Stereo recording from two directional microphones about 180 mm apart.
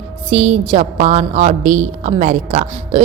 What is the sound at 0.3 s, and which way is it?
A woman's voice, 35° right (ahead or behind).